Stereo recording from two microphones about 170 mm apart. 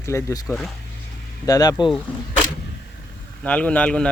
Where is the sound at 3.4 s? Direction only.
10° left (ahead or behind).